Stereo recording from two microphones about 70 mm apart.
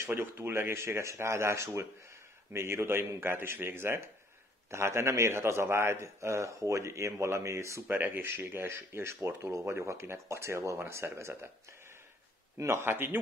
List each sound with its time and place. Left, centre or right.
0.0 s a man's voice: right
7.9 s speech: right
12.5 s speech: right